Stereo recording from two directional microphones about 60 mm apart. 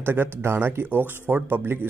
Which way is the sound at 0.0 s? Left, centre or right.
Right.